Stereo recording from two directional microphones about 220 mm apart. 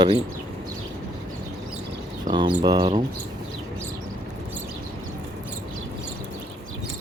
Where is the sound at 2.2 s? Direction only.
20° right (ahead or behind).